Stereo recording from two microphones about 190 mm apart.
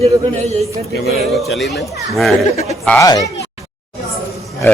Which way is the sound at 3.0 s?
20° left (ahead or behind).